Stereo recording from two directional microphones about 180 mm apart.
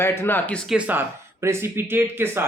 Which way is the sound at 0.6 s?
5° right (ahead or behind).